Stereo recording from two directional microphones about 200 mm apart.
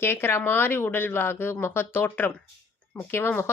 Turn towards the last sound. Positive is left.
turn(degrees=10)  # may be behind; listen again after turning